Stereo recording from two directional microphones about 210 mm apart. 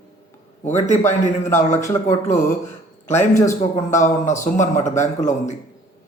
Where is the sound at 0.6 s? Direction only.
35° left (ahead or behind).